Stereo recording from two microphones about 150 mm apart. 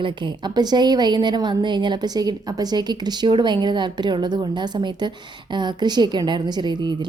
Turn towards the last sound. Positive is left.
turn(degrees=-30)  # may be behind; listen again after turning